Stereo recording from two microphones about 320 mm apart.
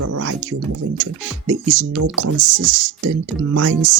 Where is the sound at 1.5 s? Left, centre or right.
Right.